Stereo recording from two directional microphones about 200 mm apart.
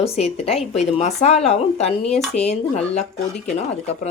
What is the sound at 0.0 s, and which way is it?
Speech, 30° left (ahead or behind).